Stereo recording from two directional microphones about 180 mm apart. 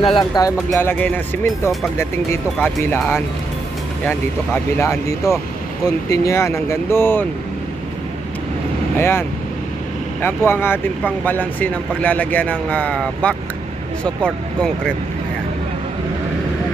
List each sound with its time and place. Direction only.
0.0 s speech: 25° left (ahead or behind)
0.7 s speech: 10° left (ahead or behind)
4.7 s speech: 15° left (ahead or behind)
8.9 s speech: 15° left (ahead or behind)
10.2 s speech: 15° left (ahead or behind)